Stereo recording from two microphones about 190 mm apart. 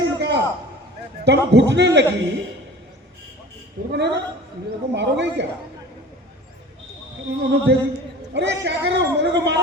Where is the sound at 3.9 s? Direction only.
60° right (ahead or behind).